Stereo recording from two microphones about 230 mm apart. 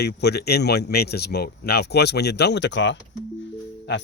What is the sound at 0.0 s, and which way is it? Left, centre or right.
Speech, left.